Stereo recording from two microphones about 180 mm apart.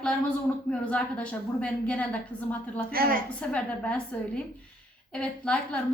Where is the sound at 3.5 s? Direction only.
5° left (ahead or behind).